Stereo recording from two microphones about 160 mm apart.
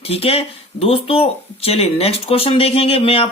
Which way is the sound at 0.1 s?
40° left (ahead or behind).